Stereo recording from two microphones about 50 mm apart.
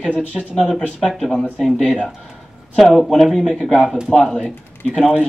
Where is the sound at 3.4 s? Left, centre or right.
Centre.